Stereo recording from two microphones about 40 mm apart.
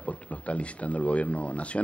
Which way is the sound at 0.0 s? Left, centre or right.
Left.